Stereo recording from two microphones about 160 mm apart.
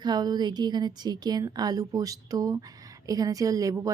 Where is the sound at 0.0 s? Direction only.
25° right (ahead or behind).